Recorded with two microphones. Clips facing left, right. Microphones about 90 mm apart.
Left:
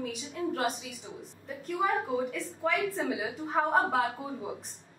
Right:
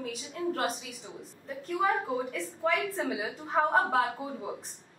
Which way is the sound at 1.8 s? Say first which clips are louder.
Even; centre (ahead or behind).